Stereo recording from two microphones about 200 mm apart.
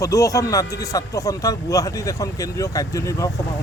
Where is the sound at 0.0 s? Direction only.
15° left (ahead or behind).